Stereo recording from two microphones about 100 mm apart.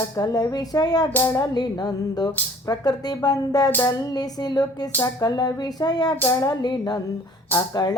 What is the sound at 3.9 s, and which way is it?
Music, 40° left (ahead or behind).